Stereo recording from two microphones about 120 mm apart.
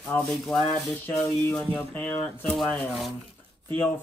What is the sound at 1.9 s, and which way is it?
Speech, 10° left (ahead or behind).